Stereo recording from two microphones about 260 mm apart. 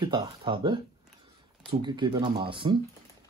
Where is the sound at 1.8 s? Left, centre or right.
Centre.